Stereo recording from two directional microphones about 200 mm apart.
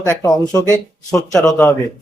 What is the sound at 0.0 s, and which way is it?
A man's voice, 15° left (ahead or behind).